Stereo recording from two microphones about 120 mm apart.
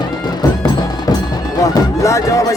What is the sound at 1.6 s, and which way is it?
Speech, 25° left (ahead or behind).